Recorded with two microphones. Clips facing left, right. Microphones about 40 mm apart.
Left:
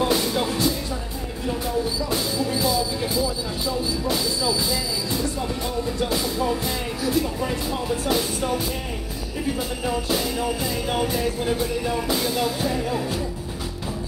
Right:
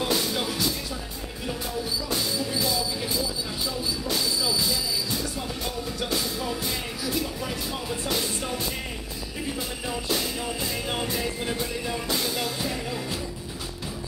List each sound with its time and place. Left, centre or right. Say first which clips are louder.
0.0 s music: left 5 dB; centre
2.0 s music: left 4 dB; centre
3.0 s a sound: left 5 dB; centre
5.9 s music: left 4 dB; centre
9.8 s music: left 4 dB; centre